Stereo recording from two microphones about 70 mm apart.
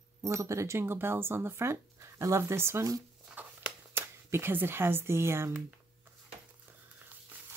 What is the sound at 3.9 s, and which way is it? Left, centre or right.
Speech, right.